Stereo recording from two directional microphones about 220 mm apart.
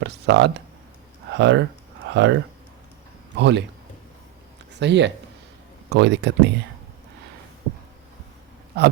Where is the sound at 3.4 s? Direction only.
50° right (ahead or behind).